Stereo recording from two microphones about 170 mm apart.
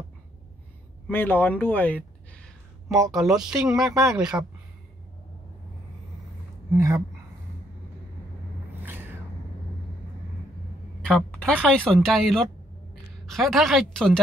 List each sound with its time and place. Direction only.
1.0 s a sound: 10° left (ahead or behind)
3.1 s speech: centre (ahead or behind)
6.7 s a woman's voice: 15° right (ahead or behind)
11.1 s a woman's voice: 5° left (ahead or behind)